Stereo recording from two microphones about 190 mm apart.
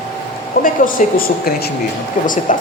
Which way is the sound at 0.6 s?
45° left (ahead or behind).